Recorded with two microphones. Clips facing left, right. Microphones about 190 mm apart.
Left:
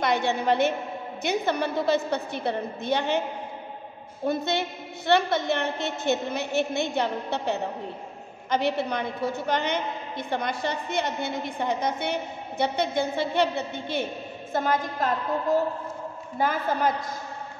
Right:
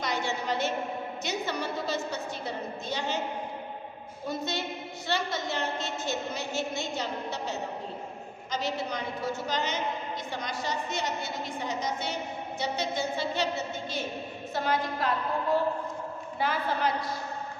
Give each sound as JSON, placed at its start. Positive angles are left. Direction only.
{"t": 0.0, "sound": "a woman's voice", "side_deg": 60}
{"t": 4.3, "sound": "a woman's voice", "side_deg": 60}
{"t": 14.5, "sound": "a woman's voice", "side_deg": 45}